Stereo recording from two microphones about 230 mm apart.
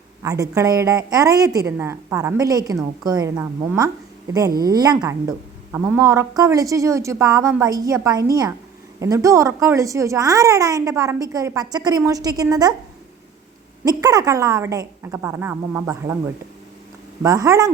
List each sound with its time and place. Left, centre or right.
0.2 s a woman's voice: centre
13.8 s a woman's voice: centre
17.2 s a woman's voice: centre